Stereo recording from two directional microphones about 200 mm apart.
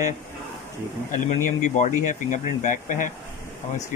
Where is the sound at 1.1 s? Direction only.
40° left (ahead or behind).